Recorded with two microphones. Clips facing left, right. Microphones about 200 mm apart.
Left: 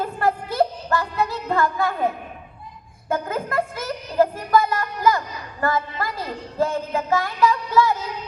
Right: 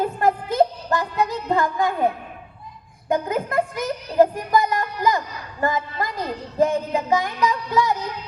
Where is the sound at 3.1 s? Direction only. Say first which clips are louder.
Right 3 dB; 15° right (ahead or behind).